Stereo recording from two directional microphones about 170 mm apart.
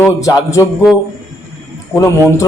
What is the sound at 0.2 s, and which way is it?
Speech, 20° left (ahead or behind).